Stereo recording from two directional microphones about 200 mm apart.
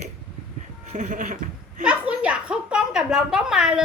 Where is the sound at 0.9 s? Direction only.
35° right (ahead or behind).